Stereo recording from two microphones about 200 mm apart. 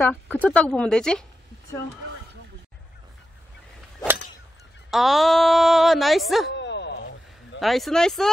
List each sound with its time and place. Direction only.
0.1 s speech: 5° left (ahead or behind)
4.9 s speech: centre (ahead or behind)
6.5 s bow-wow: 60° left (ahead or behind)
7.6 s speech: centre (ahead or behind)